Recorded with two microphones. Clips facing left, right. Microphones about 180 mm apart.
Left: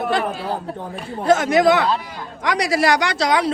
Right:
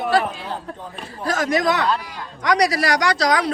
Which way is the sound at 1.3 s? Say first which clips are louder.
Left 5 dB; 25° left (ahead or behind).